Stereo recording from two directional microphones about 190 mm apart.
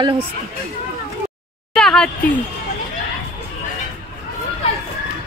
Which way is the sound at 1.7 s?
5° left (ahead or behind).